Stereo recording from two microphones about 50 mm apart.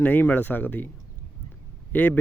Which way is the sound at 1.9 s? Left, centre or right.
Left.